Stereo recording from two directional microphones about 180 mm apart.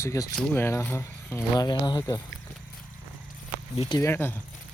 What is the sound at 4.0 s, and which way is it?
Speech, 15° left (ahead or behind).